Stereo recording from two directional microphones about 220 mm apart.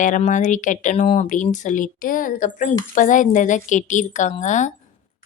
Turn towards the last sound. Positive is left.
turn(degrees=35)  # may be behind; listen again after turning